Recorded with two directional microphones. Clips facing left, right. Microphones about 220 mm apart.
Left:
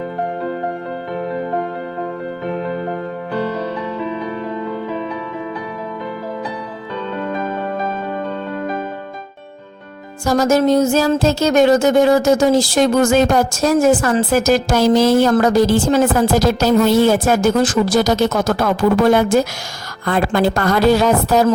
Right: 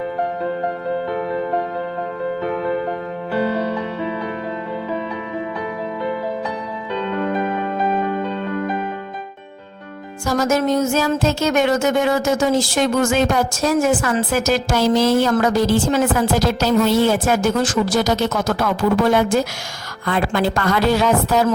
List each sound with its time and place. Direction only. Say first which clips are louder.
10.2 s music: left 4 dB; 35° left (ahead or behind)